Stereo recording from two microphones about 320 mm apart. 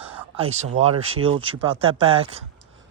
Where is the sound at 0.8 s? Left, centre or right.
Centre.